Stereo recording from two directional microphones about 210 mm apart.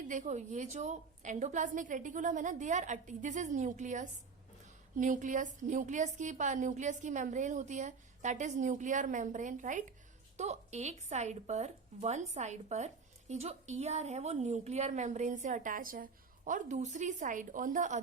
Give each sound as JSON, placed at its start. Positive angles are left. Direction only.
{"t": 0.1, "sound": "speech", "side_deg": -35}